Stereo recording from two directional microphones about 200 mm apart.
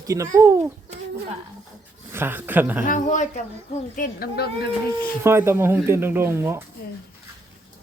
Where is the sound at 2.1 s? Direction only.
10° right (ahead or behind).